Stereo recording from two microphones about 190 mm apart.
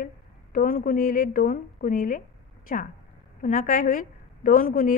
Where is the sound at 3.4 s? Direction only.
45° left (ahead or behind).